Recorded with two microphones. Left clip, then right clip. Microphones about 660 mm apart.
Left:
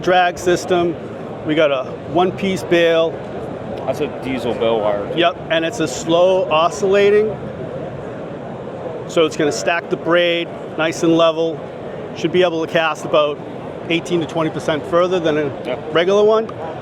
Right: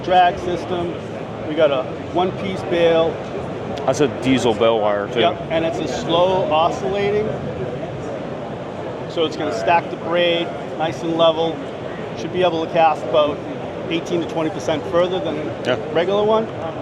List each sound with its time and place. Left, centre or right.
0.1 s speech: left
3.8 s speech: right
5.2 s speech: left
9.1 s a man's voice: left